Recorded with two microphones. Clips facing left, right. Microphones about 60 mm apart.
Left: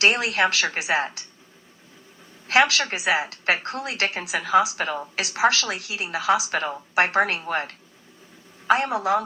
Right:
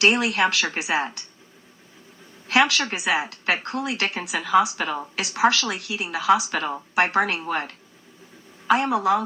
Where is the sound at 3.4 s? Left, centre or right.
Left.